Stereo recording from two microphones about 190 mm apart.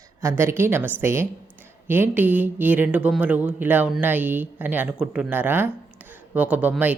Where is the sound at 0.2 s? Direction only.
15° right (ahead or behind).